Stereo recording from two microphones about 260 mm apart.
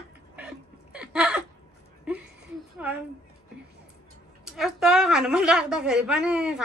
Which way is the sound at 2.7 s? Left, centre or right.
Centre.